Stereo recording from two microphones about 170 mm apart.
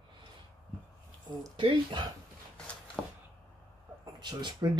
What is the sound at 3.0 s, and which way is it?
Arrow, 5° left (ahead or behind).